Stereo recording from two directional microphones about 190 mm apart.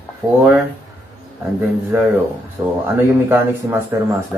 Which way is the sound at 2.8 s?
10° right (ahead or behind).